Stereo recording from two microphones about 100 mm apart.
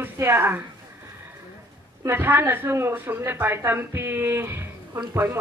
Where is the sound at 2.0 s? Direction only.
20° right (ahead or behind).